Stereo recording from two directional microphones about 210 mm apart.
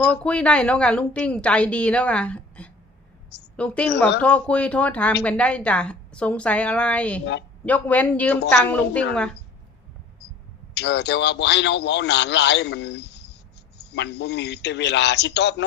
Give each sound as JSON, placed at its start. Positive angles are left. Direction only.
{"t": 0.0, "sound": "a woman's voice", "side_deg": 5}
{"t": 10.8, "sound": "a man's voice", "side_deg": 55}